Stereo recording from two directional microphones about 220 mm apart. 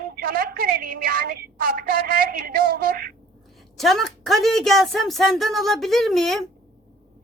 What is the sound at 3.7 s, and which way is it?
A woman's voice, centre (ahead or behind).